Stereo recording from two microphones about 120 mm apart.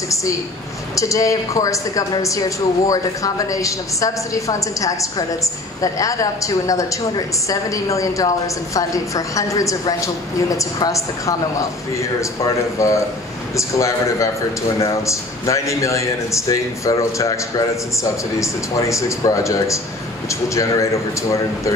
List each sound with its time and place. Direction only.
0.1 s speech: 25° left (ahead or behind)